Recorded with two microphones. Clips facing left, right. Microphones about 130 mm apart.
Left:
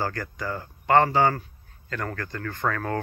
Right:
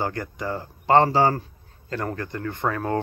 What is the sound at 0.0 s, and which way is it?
Speech, 20° right (ahead or behind).